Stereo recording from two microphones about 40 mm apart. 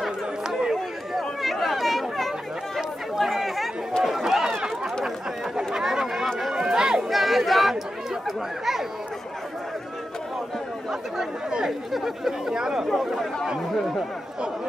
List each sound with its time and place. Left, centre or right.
1.1 s chatter: centre
4.0 s run: centre
5.8 s chatter: centre
6.5 s chatter: centre
7.0 s chatter: centre
11.9 s speech: centre